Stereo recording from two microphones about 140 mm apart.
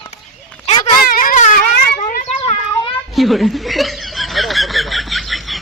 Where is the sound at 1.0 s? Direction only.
85° left.